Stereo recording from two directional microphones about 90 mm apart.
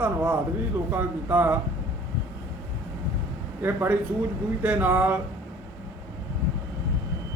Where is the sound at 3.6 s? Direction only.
25° right (ahead or behind).